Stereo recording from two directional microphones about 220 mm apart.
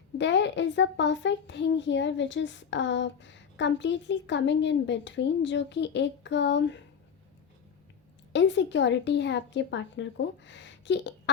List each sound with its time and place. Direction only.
0.2 s a child's voice: 55° left (ahead or behind)
8.3 s a woman's voice: 55° left (ahead or behind)